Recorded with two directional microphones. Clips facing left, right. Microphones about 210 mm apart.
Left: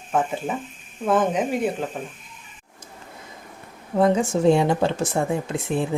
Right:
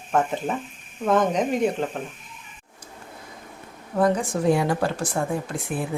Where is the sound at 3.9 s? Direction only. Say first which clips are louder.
Left 3 dB; 25° left (ahead or behind).